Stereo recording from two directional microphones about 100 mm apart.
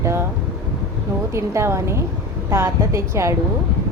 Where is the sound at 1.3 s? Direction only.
30° right (ahead or behind).